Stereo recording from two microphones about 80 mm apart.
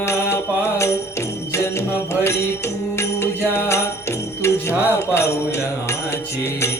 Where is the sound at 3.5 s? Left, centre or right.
Left.